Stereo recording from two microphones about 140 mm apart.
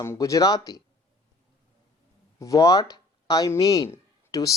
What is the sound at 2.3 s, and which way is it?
Speech, 25° left (ahead or behind).